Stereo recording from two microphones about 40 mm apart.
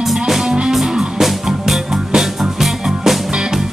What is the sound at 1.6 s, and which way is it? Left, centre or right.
Music, centre.